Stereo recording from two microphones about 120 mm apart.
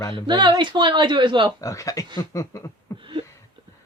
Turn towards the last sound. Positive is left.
turn(degrees=25)  # may be behind; listen again after turning